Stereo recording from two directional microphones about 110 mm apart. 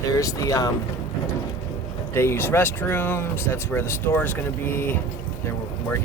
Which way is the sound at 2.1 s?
25° left (ahead or behind).